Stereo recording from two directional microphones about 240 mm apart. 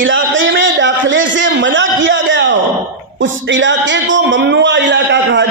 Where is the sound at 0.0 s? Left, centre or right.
Right.